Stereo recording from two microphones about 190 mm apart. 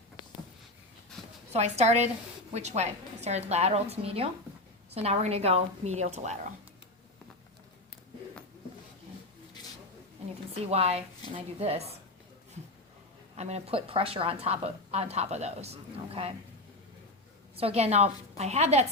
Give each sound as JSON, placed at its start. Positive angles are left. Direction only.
{"t": 1.5, "sound": "a woman's voice", "side_deg": -35}
{"t": 10.5, "sound": "a woman's voice", "side_deg": -35}
{"t": 13.3, "sound": "a woman's voice", "side_deg": -35}
{"t": 17.6, "sound": "a woman's voice", "side_deg": -30}